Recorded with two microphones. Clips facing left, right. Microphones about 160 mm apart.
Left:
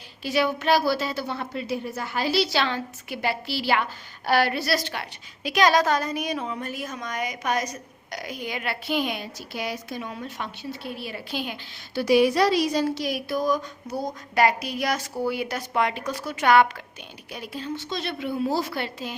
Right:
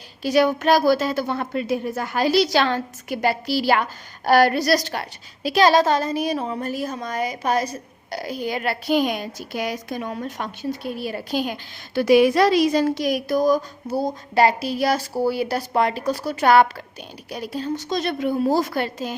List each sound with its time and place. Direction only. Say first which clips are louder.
0.2 s a woman's voice: right 6 dB; 40° right (ahead or behind)